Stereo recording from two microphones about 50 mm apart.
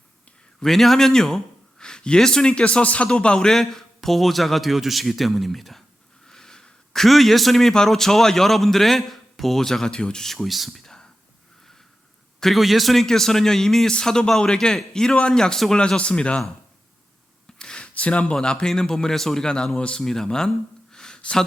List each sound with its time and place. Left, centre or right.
0.6 s a man's voice: centre
6.2 s a man's voice: centre
12.4 s a man's voice: centre; by 16.4 s left
17.6 s a sound: centre
18.0 s a man's voice: left; by 19.5 s centre
19.8 s a man's voice: left
20.9 s a sound: centre